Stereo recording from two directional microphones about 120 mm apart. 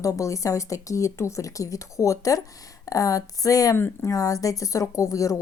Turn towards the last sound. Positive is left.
turn(degrees=30)  # may be behind; listen again after turning